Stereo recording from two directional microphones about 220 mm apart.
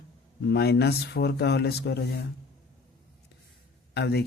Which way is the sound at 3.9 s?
50° left (ahead or behind).